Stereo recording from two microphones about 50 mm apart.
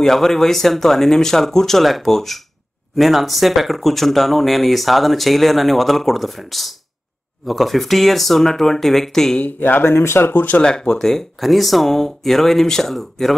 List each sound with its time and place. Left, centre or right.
0.0 s speech: centre
9.4 s speech: left
10.3 s speech: left
10.6 s speech: centre